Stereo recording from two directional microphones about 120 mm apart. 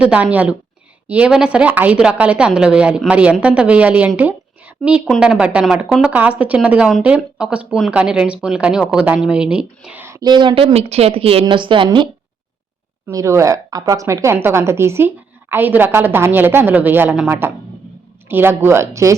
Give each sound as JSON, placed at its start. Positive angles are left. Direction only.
{"t": 0.0, "sound": "a woman's voice", "side_deg": -10}
{"t": 4.2, "sound": "a sound", "side_deg": -15}
{"t": 4.8, "sound": "a woman's voice", "side_deg": -5}
{"t": 10.2, "sound": "speech", "side_deg": -35}
{"t": 11.4, "sound": "speech", "side_deg": -40}
{"t": 13.1, "sound": "a woman's voice", "side_deg": -25}